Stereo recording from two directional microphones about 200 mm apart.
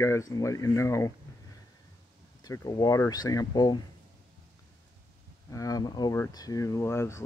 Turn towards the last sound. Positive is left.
turn(degrees=15)  # may be behind; listen again after turning